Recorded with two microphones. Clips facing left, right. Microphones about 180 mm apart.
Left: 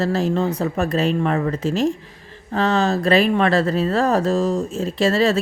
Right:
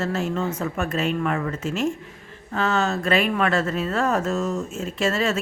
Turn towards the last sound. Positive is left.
turn(degrees=35)  # may be behind; listen again after turning